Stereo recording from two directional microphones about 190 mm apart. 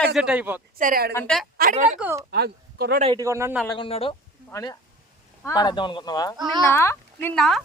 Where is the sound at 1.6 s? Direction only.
45° right (ahead or behind).